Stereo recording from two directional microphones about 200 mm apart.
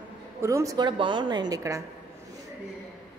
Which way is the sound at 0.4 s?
15° right (ahead or behind).